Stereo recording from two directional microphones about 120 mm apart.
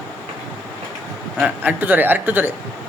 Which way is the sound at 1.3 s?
15° right (ahead or behind).